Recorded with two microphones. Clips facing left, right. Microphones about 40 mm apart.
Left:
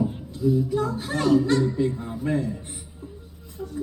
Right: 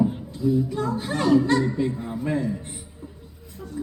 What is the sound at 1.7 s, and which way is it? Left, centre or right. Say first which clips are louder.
Chuckle: left 1 dB; centre.